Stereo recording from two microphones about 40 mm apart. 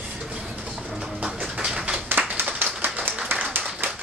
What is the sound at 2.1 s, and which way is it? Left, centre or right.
Clapping, right.